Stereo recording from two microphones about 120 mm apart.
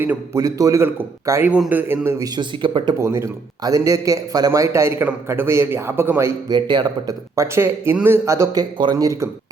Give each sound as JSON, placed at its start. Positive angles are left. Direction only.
{"t": 0.3, "sound": "a man's voice", "side_deg": -30}
{"t": 1.5, "sound": "a man's voice", "side_deg": -10}
{"t": 3.0, "sound": "a man's voice", "side_deg": -25}
{"t": 6.5, "sound": "a man's voice", "side_deg": -40}
{"t": 7.3, "sound": "a man's voice", "side_deg": -20}
{"t": 8.8, "sound": "a man's voice", "side_deg": -35}